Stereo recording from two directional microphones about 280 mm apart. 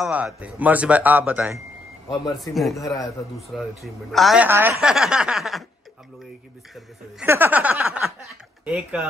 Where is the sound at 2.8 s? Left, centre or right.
Centre.